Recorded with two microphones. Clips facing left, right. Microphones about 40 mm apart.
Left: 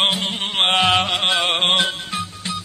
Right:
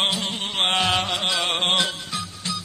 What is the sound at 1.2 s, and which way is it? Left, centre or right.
Music, left.